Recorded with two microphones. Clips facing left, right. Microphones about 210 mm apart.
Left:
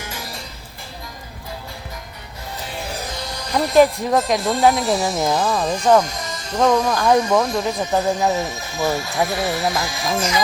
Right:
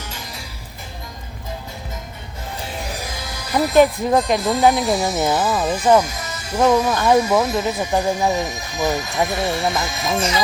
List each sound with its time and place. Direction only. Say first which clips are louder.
3.0 s speech: left 1 dB; 10° right (ahead or behind); by 10.1 s 25° right (ahead or behind)